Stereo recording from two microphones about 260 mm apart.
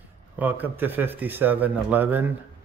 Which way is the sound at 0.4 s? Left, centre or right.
Centre.